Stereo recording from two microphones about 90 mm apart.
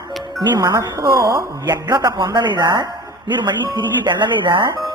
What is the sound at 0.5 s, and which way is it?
A woman's voice, 45° right (ahead or behind).